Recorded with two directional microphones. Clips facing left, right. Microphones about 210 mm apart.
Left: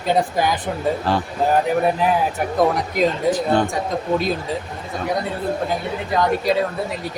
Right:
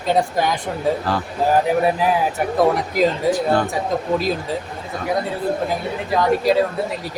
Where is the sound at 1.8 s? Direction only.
Centre (ahead or behind).